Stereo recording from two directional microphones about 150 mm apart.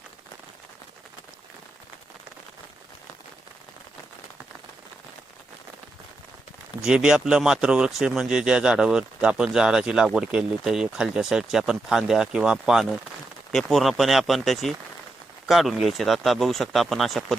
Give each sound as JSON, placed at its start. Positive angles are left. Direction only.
{"t": 6.8, "sound": "speech", "side_deg": -5}